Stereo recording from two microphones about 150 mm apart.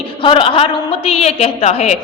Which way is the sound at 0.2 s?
35° left (ahead or behind).